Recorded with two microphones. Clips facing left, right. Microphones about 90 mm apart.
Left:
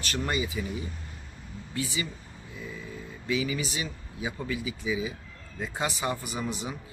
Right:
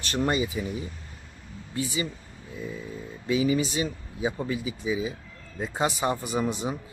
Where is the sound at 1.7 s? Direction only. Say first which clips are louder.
Right 3 dB; 30° right (ahead or behind).